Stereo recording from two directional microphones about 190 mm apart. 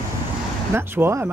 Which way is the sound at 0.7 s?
10° right (ahead or behind).